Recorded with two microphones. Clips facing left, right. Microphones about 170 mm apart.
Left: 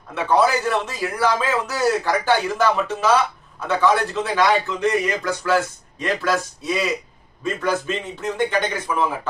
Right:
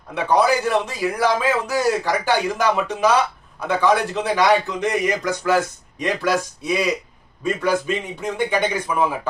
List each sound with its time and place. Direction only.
0.1 s speech: 15° right (ahead or behind)